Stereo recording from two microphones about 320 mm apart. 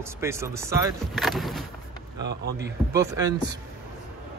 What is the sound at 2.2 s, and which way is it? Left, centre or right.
Speech, right.